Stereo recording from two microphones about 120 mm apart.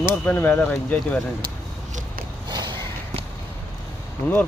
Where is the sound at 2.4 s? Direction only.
35° right (ahead or behind).